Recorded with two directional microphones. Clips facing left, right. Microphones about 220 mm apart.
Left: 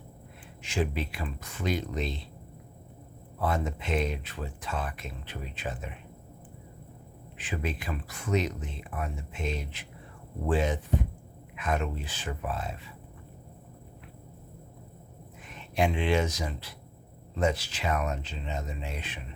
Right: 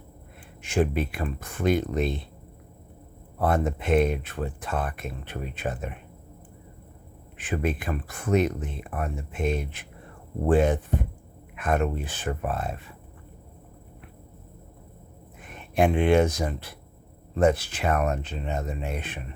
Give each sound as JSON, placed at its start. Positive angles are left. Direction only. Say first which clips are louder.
{"t": 0.6, "sound": "speech", "louder": "right 6 dB", "side_deg": -55}
{"t": 3.3, "sound": "speech", "louder": "right 6 dB", "side_deg": -55}
{"t": 7.3, "sound": "speech", "louder": "right 6 dB", "side_deg": -55}
{"t": 15.4, "sound": "speech", "louder": "right 5 dB", "side_deg": -55}